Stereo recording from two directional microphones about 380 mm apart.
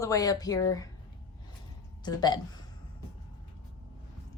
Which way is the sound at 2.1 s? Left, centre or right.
Centre.